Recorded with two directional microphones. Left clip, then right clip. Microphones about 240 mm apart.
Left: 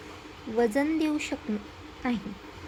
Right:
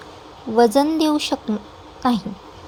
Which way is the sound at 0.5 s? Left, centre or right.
Centre.